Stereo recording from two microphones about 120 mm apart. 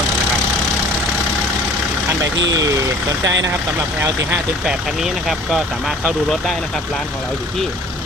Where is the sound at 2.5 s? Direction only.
30° right (ahead or behind).